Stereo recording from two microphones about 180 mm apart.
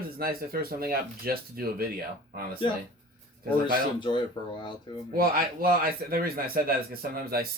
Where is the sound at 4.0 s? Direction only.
25° left (ahead or behind).